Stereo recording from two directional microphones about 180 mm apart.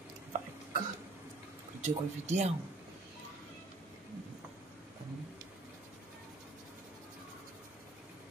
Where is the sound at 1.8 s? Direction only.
40° right (ahead or behind).